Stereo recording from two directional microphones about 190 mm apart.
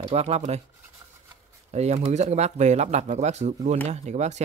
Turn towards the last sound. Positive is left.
turn(degrees=-35)  # may be behind; listen again after turning